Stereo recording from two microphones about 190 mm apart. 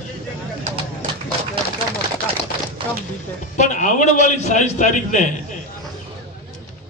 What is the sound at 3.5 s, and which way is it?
A man's voice, 40° left (ahead or behind).